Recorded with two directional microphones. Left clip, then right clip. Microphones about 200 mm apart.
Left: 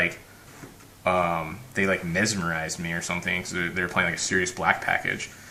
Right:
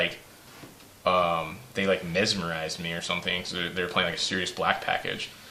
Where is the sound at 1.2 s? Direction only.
45° right (ahead or behind).